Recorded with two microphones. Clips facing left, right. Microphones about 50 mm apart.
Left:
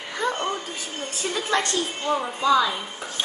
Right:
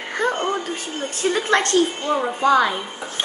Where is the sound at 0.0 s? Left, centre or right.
Right.